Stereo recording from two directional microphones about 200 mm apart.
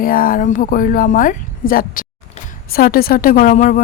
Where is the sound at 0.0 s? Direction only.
45° left (ahead or behind).